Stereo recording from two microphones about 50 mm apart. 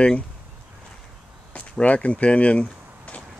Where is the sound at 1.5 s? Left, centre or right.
Left.